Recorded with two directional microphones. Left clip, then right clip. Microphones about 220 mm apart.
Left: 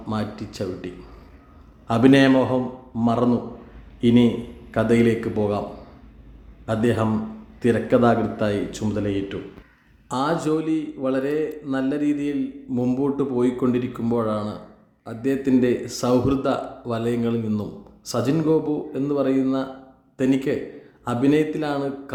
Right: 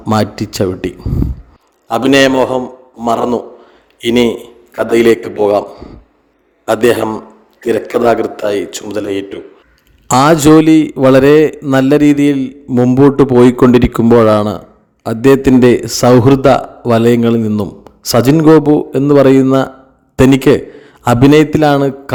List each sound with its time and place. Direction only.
0.0 s a man's voice: 45° right (ahead or behind)
6.7 s a man's voice: 45° right (ahead or behind)